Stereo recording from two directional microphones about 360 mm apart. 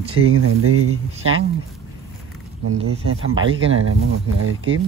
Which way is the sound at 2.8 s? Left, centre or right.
Right.